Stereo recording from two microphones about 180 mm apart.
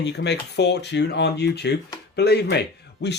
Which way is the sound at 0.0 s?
70° left (ahead or behind).